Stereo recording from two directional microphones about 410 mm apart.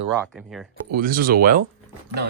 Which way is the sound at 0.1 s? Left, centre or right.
Centre.